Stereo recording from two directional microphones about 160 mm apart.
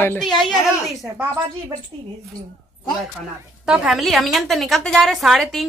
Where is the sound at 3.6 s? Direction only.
5° right (ahead or behind).